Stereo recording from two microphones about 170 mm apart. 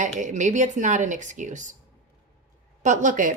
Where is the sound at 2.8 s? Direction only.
50° right (ahead or behind).